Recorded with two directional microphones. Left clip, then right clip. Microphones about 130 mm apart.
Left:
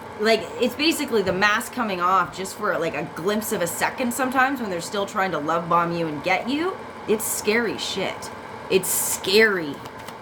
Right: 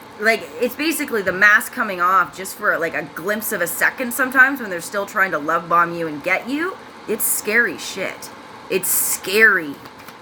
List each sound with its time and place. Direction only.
0.2 s a woman's voice: 15° left (ahead or behind)